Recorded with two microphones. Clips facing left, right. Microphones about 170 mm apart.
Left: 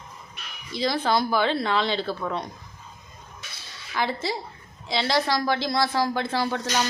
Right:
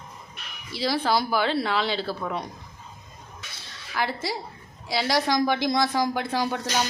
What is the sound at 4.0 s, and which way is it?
A woman's voice, 10° right (ahead or behind).